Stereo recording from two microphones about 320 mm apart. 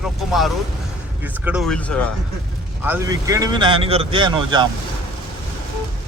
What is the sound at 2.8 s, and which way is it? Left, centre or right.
Speech, centre.